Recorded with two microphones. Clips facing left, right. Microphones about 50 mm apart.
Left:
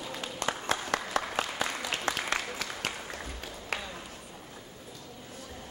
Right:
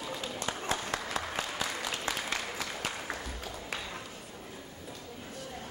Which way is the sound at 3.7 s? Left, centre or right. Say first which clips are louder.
Left 4 dB; left.